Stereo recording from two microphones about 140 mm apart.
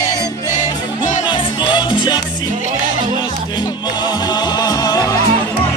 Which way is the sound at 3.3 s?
30° left (ahead or behind).